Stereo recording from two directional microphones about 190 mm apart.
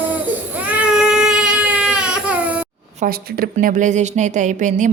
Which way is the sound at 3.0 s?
45° right (ahead or behind).